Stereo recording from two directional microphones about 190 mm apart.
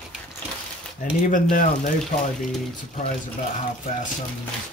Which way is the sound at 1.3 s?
45° left (ahead or behind).